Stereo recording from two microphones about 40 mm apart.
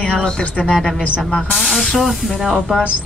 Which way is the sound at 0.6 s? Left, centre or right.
Left.